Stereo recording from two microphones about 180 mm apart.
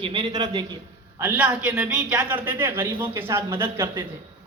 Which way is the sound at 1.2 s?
10° right (ahead or behind).